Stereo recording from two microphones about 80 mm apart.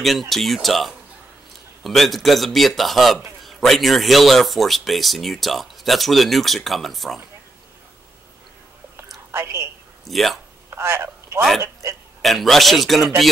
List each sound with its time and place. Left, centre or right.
0.0 s speech: centre
9.3 s a woman's voice: right
10.0 s speech: centre
10.7 s speech: right
12.2 s speech: centre